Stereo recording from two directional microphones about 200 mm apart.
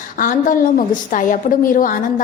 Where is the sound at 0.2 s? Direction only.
40° left (ahead or behind).